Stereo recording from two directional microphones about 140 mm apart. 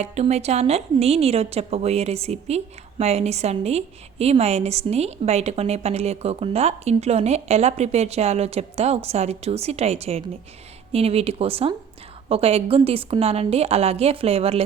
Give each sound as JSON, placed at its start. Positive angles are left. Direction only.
{"t": 0.0, "sound": "a woman's voice", "side_deg": -50}